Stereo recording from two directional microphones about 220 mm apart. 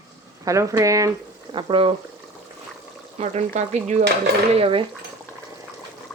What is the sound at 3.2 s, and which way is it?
Stir, 30° right (ahead or behind).